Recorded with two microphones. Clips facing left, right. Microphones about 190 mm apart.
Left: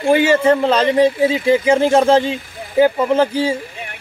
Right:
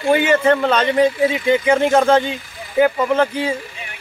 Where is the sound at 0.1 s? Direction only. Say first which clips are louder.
Left 2 dB; 30° left (ahead or behind).